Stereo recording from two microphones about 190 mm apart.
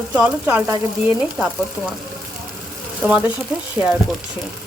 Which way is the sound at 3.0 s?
5° right (ahead or behind).